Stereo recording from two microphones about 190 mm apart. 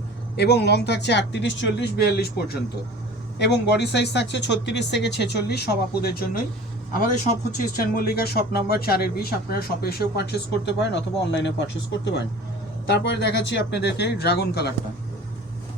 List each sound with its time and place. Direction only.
0.3 s speech: 60° left (ahead or behind)
7.8 s speech: 55° left (ahead or behind)